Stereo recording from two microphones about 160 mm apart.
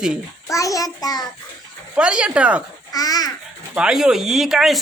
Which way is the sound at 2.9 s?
25° left (ahead or behind).